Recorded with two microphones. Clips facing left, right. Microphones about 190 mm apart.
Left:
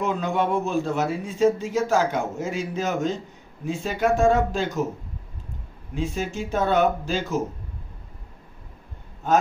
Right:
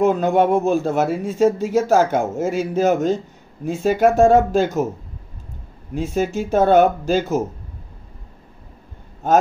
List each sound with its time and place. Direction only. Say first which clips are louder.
0.0 s speech: right 8 dB; 45° right (ahead or behind)
5.9 s speech: right 6 dB; 45° right (ahead or behind)